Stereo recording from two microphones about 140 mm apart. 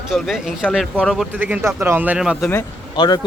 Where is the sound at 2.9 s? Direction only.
30° left (ahead or behind).